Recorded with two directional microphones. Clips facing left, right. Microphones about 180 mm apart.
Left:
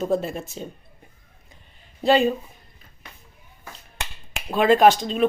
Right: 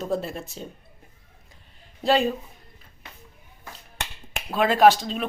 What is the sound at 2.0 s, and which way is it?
Speech, centre (ahead or behind).